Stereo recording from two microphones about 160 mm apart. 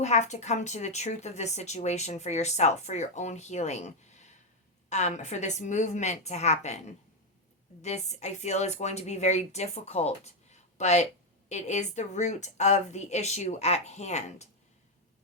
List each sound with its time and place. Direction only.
0.0 s a woman's voice: 45° left (ahead or behind)